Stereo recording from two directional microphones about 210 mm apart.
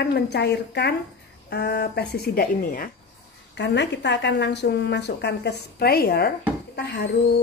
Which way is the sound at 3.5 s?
55° left (ahead or behind).